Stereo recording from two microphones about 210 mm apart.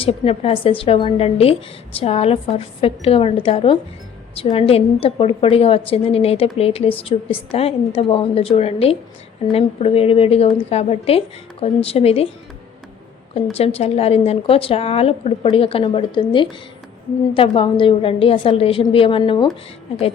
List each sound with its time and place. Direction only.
0.0 s a woman's voice: 25° left (ahead or behind)
13.6 s a woman's voice: 30° left (ahead or behind)